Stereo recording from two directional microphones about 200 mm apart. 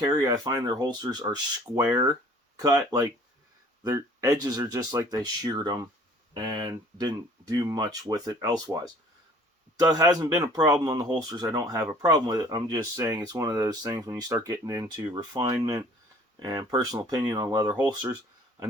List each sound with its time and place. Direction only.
0.0 s speech: 20° right (ahead or behind)